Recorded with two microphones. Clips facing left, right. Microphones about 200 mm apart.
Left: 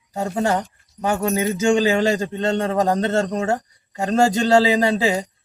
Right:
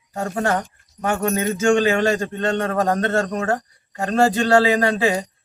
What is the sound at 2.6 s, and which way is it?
Speech, 15° left (ahead or behind).